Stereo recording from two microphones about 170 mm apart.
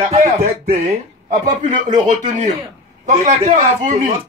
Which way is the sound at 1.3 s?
50° right (ahead or behind).